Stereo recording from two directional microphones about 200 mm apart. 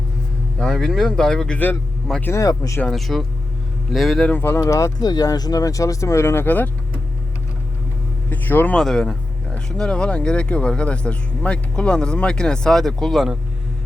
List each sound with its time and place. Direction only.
0.6 s speech: centre (ahead or behind)
2.8 s speech: centre (ahead or behind)
8.3 s speech: 10° left (ahead or behind)